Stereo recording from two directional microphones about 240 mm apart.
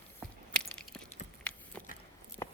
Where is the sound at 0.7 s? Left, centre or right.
Centre.